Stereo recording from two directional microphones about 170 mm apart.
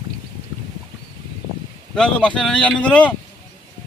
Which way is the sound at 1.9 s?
5° left (ahead or behind).